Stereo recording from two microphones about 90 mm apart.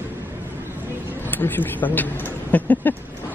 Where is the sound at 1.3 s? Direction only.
20° left (ahead or behind).